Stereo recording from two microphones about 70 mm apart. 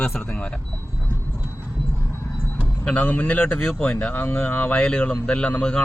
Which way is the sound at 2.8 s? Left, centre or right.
Left.